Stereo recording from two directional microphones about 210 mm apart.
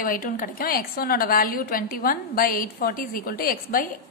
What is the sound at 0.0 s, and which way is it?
A woman's voice, 40° left (ahead or behind).